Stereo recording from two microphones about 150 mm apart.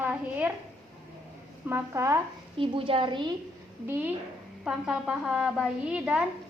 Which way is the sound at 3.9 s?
10° right (ahead or behind).